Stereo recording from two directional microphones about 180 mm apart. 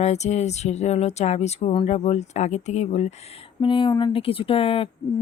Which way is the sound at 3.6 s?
30° left (ahead or behind).